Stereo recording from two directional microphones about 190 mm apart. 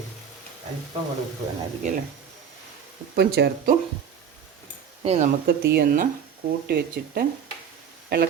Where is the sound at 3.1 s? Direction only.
55° right (ahead or behind).